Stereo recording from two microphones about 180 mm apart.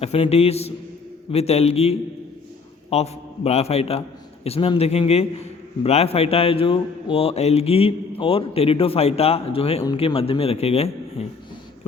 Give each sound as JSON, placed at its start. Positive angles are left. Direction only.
{"t": 0.0, "sound": "a man's voice", "side_deg": 35}